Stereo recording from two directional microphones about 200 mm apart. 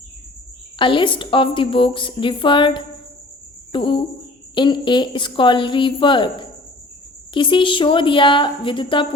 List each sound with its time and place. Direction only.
0.8 s a woman's voice: 25° left (ahead or behind)